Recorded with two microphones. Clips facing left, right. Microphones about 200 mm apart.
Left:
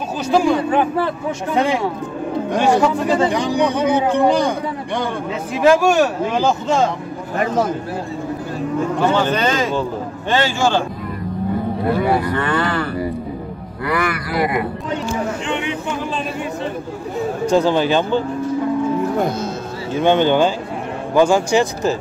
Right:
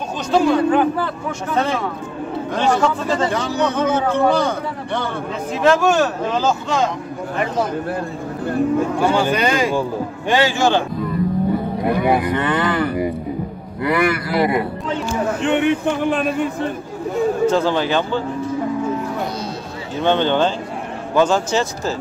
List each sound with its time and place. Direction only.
0.3 s speech: 10° left (ahead or behind)
0.7 s a man's voice: 25° left (ahead or behind)
1.6 s speech: 15° left (ahead or behind)
9.0 s speech: 10° right (ahead or behind)
11.8 s speech: 15° right (ahead or behind)
15.4 s speech: 60° right (ahead or behind)
17.5 s speech: 15° left (ahead or behind)
19.1 s speech: 50° left (ahead or behind)
20.0 s speech: 10° left (ahead or behind)